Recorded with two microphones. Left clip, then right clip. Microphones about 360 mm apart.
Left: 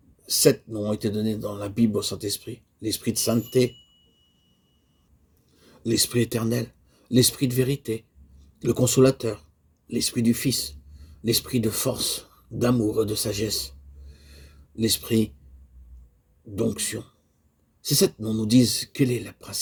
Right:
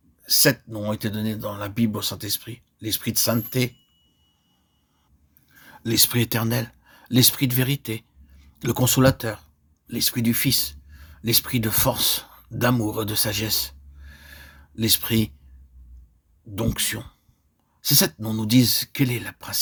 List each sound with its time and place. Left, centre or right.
0.3 s speech: right
5.7 s speech: right
16.6 s speech: right